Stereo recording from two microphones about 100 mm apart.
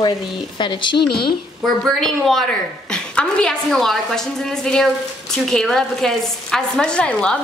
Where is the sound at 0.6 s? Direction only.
50° left (ahead or behind).